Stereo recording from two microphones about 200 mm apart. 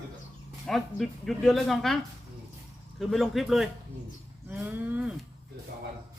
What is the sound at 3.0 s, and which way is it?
Speech, centre (ahead or behind).